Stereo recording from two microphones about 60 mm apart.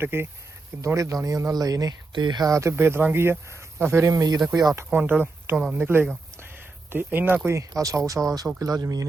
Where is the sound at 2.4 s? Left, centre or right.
Right.